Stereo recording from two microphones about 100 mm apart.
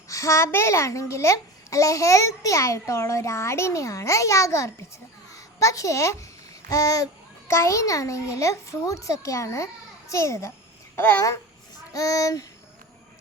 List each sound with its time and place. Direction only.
0.1 s a child's voice: 30° left (ahead or behind)
11.9 s a child's voice: 35° left (ahead or behind)